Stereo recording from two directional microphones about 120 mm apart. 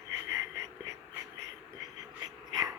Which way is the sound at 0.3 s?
25° right (ahead or behind).